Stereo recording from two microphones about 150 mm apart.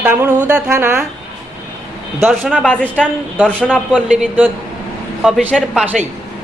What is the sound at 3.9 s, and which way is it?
A man's voice, 10° right (ahead or behind).